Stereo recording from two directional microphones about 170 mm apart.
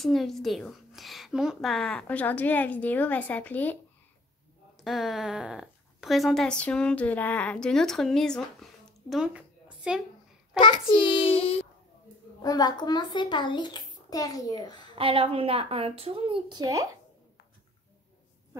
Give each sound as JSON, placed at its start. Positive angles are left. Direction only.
{"t": 0.0, "sound": "a woman's voice", "side_deg": 0}
{"t": 4.7, "sound": "a woman's voice", "side_deg": 0}
{"t": 10.5, "sound": "a child's voice", "side_deg": 25}
{"t": 12.4, "sound": "a child's voice", "side_deg": 20}
{"t": 15.0, "sound": "a woman's voice", "side_deg": -30}